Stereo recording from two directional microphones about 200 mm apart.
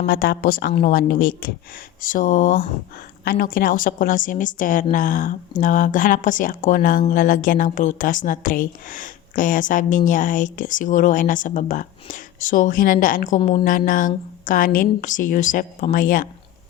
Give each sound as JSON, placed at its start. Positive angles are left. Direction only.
{"t": 0.0, "sound": "a woman's voice", "side_deg": 50}
{"t": 13.4, "sound": "a woman's voice", "side_deg": 20}
{"t": 13.7, "sound": "a woman's voice", "side_deg": 40}